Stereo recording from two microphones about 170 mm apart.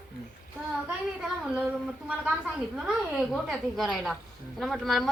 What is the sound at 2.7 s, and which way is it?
A woman's voice, centre (ahead or behind).